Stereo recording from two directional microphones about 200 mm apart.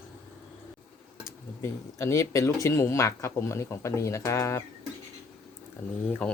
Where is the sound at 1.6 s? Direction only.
15° left (ahead or behind).